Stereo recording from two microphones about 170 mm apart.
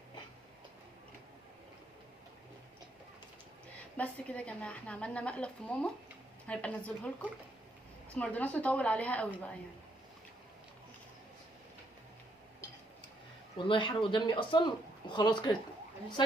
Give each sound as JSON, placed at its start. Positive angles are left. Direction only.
{"t": 3.9, "sound": "a woman's voice", "side_deg": 5}
{"t": 13.7, "sound": "speech", "side_deg": 30}